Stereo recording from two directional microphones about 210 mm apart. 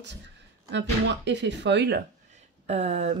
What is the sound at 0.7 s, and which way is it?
Speech, 55° right (ahead or behind).